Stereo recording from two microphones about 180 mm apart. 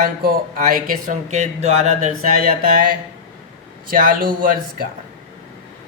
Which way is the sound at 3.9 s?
50° right (ahead or behind).